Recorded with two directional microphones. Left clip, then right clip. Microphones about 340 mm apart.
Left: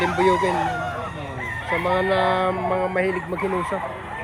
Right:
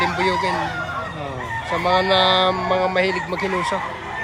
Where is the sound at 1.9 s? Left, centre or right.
Centre.